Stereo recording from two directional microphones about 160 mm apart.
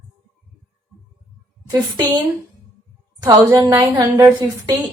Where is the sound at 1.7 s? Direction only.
25° right (ahead or behind).